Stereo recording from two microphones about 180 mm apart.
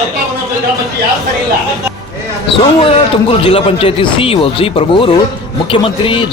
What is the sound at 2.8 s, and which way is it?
A man's voice, 30° left (ahead or behind).